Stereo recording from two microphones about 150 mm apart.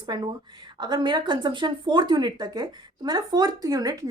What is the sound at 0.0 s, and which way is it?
A woman's voice, 30° right (ahead or behind).